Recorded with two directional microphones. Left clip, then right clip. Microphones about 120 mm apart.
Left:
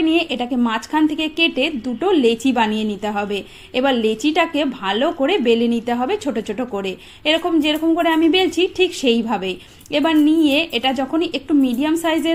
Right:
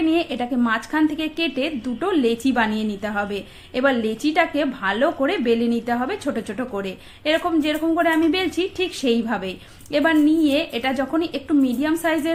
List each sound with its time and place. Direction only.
0.0 s a woman's voice: 25° left (ahead or behind)